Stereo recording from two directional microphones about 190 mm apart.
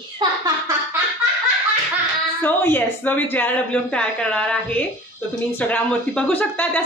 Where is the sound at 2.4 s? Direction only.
10° left (ahead or behind).